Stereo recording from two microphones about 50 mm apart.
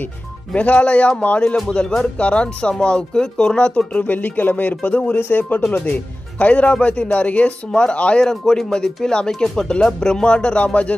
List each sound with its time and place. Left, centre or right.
0.6 s speech: left
8.2 s speech: centre; by 11.0 s left